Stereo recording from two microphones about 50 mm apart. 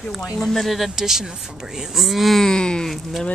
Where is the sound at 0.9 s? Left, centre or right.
Centre.